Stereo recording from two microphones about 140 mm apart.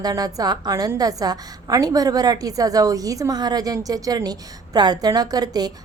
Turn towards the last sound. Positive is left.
turn(degrees=-30)  # may be behind; listen again after turning